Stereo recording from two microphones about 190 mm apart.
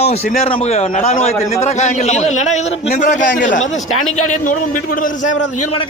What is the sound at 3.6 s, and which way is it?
Speech, 90° left.